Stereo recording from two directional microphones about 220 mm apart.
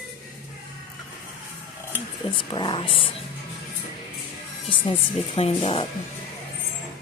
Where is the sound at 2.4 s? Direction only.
20° left (ahead or behind).